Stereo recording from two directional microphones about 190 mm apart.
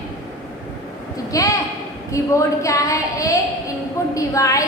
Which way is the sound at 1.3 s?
15° left (ahead or behind).